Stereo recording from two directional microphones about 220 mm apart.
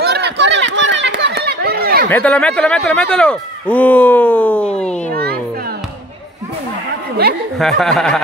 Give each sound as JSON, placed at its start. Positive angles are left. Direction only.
{"t": 0.0, "sound": "chatter", "side_deg": -50}
{"t": 2.0, "sound": "speech", "side_deg": 5}
{"t": 5.1, "sound": "a sound", "side_deg": -45}
{"t": 7.5, "sound": "speech", "side_deg": 0}